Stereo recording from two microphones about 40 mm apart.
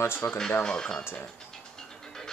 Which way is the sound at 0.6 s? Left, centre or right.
Centre.